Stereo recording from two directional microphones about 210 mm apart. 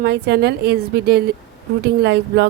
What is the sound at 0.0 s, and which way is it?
A woman's voice, 50° right (ahead or behind).